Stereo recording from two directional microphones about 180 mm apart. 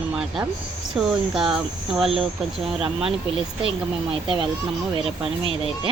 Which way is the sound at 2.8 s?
30° right (ahead or behind).